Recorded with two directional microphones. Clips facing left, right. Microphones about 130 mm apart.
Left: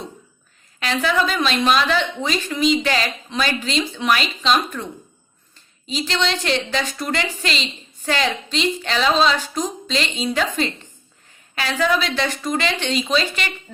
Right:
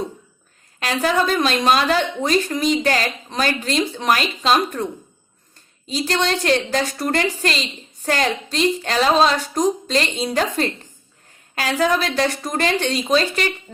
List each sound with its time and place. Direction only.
1.0 s a woman's voice: 45° right (ahead or behind)
6.1 s a woman's voice: 45° right (ahead or behind)